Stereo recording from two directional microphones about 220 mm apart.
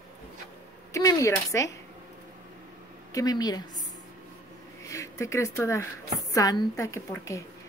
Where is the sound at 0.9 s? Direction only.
15° left (ahead or behind).